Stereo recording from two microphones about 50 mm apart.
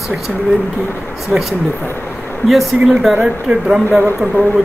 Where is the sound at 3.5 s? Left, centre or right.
Centre.